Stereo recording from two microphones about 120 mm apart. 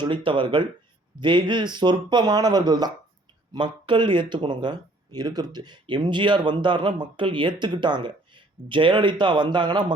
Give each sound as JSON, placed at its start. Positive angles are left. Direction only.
{"t": 0.0, "sound": "speech", "side_deg": -40}